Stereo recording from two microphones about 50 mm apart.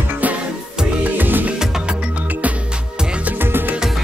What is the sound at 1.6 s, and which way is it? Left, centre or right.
Music, centre.